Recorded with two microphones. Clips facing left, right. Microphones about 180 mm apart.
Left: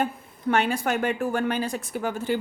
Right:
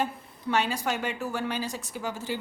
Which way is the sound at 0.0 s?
55° left (ahead or behind).